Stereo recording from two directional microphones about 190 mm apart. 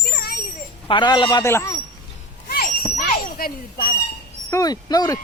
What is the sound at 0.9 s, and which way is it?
Speech, 25° left (ahead or behind).